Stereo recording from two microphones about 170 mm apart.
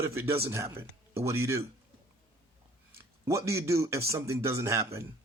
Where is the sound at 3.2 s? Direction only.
20° right (ahead or behind).